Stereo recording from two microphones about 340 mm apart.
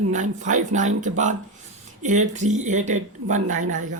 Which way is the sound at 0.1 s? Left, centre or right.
Right.